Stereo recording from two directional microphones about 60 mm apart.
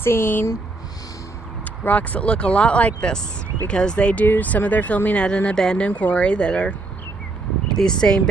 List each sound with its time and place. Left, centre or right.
0.0 s speech: left
1.6 s speech: left
5.5 s speech: centre
5.8 s speech: left